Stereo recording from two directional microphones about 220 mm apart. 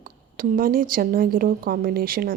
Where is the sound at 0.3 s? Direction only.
40° right (ahead or behind).